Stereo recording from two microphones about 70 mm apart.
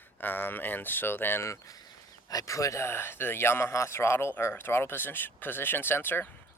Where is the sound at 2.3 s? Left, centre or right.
Left.